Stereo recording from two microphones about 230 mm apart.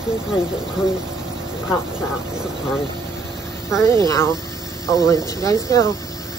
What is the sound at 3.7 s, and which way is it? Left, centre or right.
Speech, centre.